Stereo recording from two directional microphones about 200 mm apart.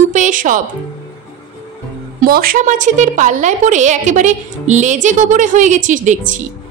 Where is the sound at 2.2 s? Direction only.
45° right (ahead or behind).